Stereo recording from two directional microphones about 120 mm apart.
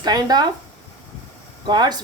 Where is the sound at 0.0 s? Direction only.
35° right (ahead or behind).